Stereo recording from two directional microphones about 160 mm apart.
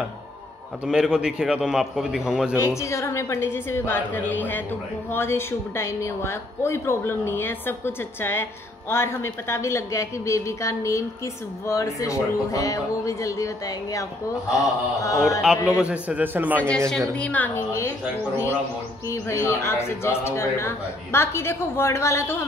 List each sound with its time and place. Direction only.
0.8 s a man's voice: 5° right (ahead or behind)
2.5 s a woman's voice: 20° left (ahead or behind)
15.4 s a man's voice: 5° right (ahead or behind)
17.2 s a woman's voice: 10° left (ahead or behind)
19.0 s a woman's voice: 15° left (ahead or behind)